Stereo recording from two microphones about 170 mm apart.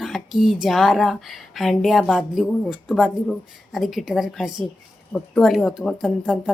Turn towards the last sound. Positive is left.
turn(degrees=-5)  # may be behind; listen again after turning